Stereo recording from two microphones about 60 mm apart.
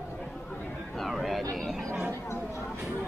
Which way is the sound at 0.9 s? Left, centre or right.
Centre.